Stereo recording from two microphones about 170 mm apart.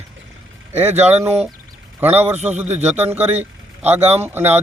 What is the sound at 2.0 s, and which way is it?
Speech, 10° right (ahead or behind).